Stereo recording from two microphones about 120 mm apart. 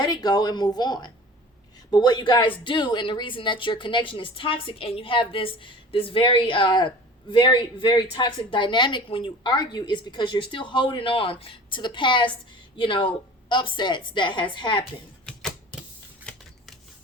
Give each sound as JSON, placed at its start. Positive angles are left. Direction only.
{"t": 0.0, "sound": "a woman's voice", "side_deg": 35}
{"t": 15.3, "sound": "typewriter", "side_deg": 5}
{"t": 16.3, "sound": "scissors", "side_deg": 5}